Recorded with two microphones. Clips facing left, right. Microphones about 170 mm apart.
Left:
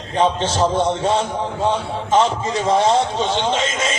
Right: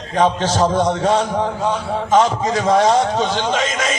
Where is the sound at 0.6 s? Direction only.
25° left (ahead or behind).